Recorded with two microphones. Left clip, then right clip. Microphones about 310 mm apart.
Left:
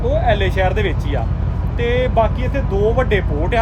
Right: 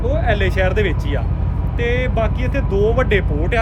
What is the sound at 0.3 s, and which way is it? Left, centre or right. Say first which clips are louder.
Speech: even; centre.